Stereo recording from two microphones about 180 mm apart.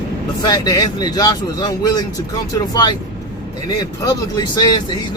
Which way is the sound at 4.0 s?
20° left (ahead or behind).